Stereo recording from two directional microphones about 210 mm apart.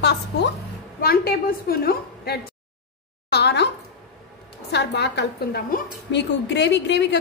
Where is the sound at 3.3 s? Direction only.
50° left (ahead or behind).